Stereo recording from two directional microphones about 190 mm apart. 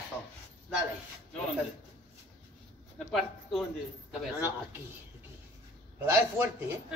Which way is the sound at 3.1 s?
Centre (ahead or behind).